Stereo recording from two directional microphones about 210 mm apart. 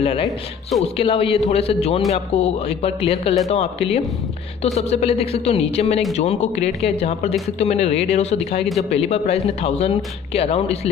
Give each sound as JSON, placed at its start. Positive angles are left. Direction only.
{"t": 0.9, "sound": "speech", "side_deg": 25}